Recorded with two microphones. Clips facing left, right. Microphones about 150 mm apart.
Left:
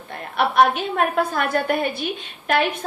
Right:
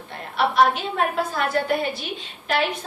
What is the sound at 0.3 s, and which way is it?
A woman's voice, 55° left (ahead or behind).